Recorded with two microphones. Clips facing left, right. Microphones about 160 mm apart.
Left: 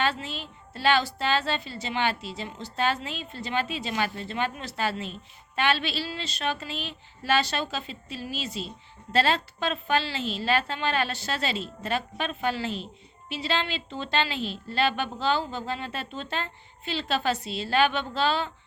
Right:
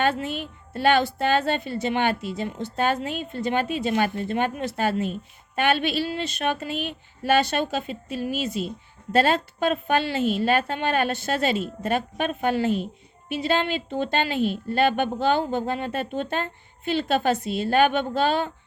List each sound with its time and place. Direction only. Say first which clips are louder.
0.0 s a woman's voice: right 5 dB; 50° right (ahead or behind)